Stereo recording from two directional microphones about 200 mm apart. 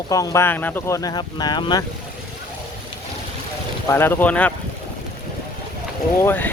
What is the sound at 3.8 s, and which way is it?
Speech, 10° left (ahead or behind).